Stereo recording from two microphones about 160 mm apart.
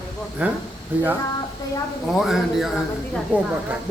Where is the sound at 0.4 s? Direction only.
10° right (ahead or behind).